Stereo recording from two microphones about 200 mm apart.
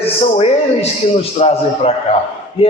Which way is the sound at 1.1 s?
30° left (ahead or behind).